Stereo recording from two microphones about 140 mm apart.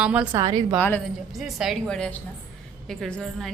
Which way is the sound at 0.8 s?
10° left (ahead or behind).